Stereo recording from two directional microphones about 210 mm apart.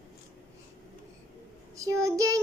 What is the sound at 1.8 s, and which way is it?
Child singing, 15° right (ahead or behind).